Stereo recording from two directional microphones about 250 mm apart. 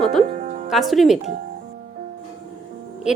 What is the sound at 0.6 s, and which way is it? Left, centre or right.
Speech, centre.